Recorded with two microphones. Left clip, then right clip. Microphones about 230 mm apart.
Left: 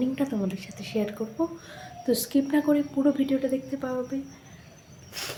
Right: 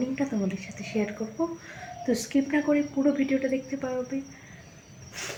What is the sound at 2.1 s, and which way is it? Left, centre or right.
A woman's voice, centre.